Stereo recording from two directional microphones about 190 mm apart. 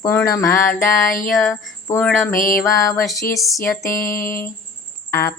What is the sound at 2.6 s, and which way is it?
Music, centre (ahead or behind).